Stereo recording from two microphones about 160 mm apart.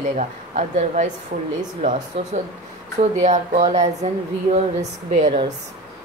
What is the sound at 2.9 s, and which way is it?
Speech, 45° right (ahead or behind).